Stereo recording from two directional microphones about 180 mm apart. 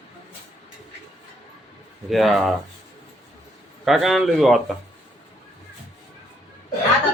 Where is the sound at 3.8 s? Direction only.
Centre (ahead or behind).